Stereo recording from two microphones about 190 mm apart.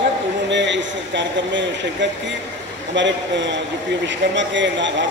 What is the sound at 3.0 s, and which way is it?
A man's voice, 70° right (ahead or behind).